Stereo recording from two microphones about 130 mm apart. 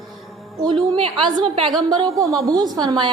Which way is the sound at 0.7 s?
40° right (ahead or behind).